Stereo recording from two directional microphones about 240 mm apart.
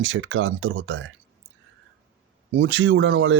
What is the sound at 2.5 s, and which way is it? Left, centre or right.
Speech, right.